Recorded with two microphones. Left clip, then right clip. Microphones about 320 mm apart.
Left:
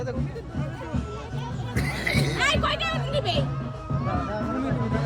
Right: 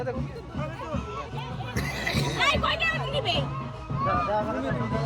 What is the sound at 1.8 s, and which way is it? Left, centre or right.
Music, centre.